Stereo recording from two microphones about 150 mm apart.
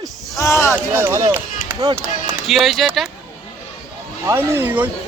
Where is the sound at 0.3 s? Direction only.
20° left (ahead or behind).